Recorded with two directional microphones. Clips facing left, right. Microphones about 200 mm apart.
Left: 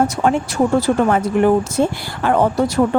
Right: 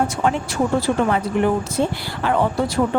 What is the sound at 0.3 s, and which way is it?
Speech, 45° left (ahead or behind).